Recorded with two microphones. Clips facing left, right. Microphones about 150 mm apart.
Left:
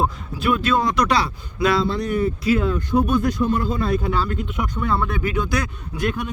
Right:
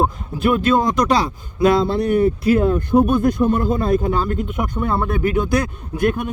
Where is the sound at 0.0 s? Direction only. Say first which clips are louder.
Right 4 dB; 50° right (ahead or behind).